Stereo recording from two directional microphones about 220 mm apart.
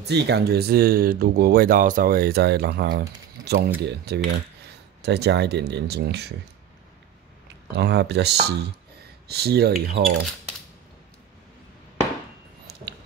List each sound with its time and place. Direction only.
0.0 s speech: 50° right (ahead or behind)
7.7 s speech: 50° right (ahead or behind)